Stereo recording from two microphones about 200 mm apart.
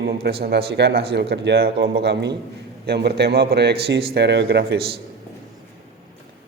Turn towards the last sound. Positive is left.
turn(degrees=-55)  # may be behind; listen again after turning